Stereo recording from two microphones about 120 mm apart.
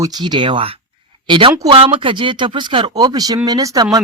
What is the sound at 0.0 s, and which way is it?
Speech, 35° right (ahead or behind).